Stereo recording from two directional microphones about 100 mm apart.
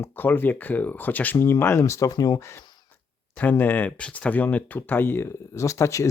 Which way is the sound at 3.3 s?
15° left (ahead or behind).